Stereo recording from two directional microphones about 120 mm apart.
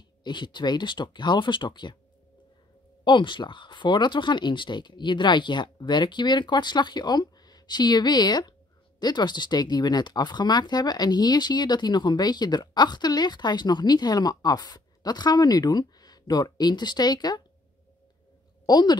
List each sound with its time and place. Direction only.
0.2 s speech: 40° left (ahead or behind)
3.0 s speech: 40° left (ahead or behind)
18.7 s speech: 35° left (ahead or behind)